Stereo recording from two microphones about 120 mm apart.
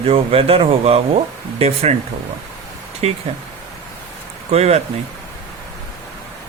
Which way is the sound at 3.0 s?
55° right (ahead or behind).